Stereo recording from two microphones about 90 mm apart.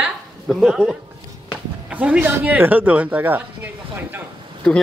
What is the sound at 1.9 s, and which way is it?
A man's voice, 15° right (ahead or behind).